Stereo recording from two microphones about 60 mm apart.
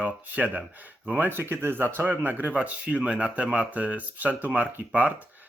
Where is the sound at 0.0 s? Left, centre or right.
Right.